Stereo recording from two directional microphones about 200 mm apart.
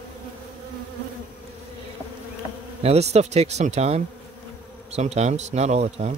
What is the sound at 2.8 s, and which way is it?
Speech, 30° right (ahead or behind).